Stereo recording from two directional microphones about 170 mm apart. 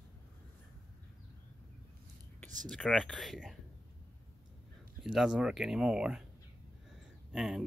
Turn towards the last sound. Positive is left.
turn(degrees=0)  # may be behind; listen again after turning